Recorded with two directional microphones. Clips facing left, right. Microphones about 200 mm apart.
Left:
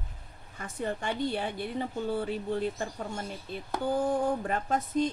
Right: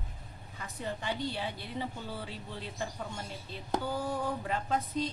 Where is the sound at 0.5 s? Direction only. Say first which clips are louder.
Left 5 dB; 50° left (ahead or behind).